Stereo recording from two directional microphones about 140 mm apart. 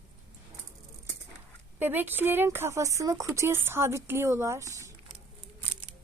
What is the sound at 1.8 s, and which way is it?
Speech, 15° right (ahead or behind).